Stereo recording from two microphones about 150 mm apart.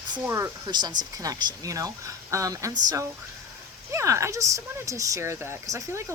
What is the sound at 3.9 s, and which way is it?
Speech, 20° right (ahead or behind).